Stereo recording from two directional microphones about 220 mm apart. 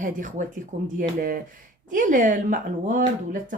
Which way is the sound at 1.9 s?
35° right (ahead or behind).